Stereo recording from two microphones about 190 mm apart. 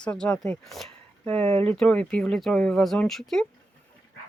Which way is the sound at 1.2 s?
30° right (ahead or behind).